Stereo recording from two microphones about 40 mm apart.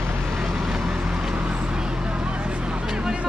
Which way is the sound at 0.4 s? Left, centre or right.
Centre.